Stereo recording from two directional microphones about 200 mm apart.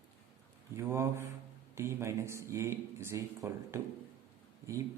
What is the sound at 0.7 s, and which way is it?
Speech, 15° right (ahead or behind).